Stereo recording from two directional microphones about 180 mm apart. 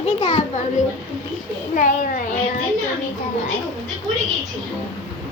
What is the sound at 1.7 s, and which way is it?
Speech, 45° left (ahead or behind).